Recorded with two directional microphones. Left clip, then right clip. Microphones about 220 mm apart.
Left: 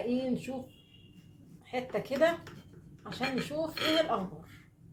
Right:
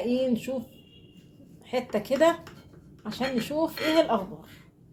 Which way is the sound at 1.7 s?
45° right (ahead or behind).